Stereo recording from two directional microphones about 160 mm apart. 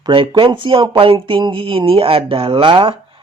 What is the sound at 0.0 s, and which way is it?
Speech, 30° right (ahead or behind).